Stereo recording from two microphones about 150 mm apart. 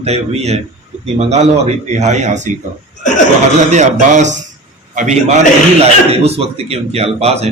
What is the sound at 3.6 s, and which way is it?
A man's voice, 55° right (ahead or behind).